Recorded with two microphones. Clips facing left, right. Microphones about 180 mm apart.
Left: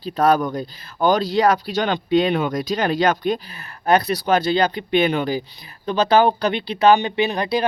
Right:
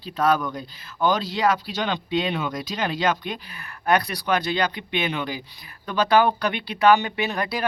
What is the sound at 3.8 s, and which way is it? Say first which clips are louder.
Speech: left 4 dB; 25° left (ahead or behind).